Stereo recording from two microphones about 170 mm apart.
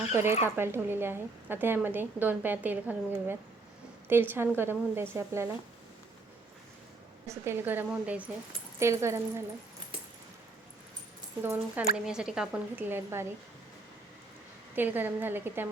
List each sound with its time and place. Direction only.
0.1 s a woman's voice: 15° right (ahead or behind)
7.3 s a woman's voice: 15° right (ahead or behind)
11.4 s a woman's voice: 10° right (ahead or behind)
14.8 s a woman's voice: 10° right (ahead or behind)